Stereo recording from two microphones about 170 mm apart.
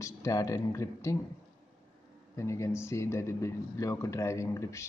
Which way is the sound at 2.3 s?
15° left (ahead or behind).